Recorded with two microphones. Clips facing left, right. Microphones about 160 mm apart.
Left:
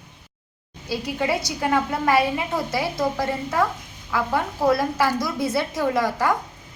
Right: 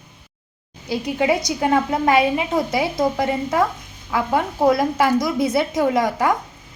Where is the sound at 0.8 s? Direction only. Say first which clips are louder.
Right 5 dB; 15° right (ahead or behind).